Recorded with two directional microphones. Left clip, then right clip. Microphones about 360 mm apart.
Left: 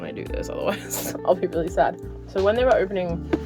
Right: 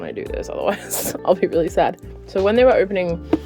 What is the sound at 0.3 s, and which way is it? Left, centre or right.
Speech, centre.